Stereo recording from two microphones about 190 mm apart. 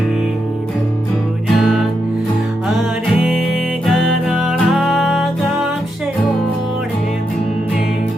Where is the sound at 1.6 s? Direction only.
Centre (ahead or behind).